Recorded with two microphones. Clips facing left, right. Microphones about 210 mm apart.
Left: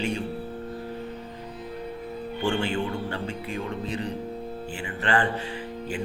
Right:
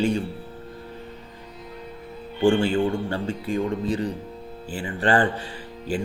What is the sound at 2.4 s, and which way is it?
Speech, 30° right (ahead or behind).